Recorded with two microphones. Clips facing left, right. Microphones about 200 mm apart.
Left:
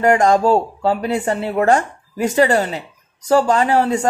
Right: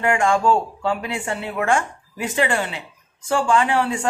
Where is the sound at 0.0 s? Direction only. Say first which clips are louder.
Left 5 dB; 40° left (ahead or behind).